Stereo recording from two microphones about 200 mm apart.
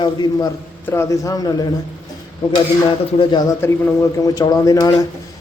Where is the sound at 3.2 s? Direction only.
20° left (ahead or behind).